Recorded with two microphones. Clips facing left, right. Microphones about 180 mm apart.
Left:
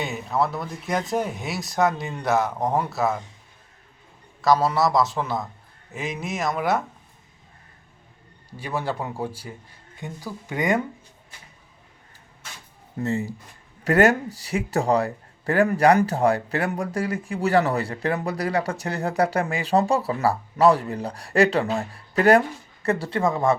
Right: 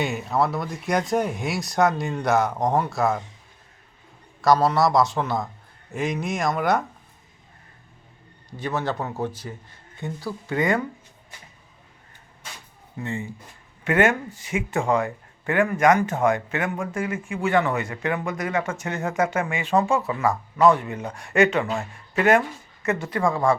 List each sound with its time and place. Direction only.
0.0 s speech: centre (ahead or behind)
4.4 s speech: centre (ahead or behind)
8.4 s speech: 10° left (ahead or behind)
13.0 s speech: 40° left (ahead or behind); by 23.6 s 20° left (ahead or behind)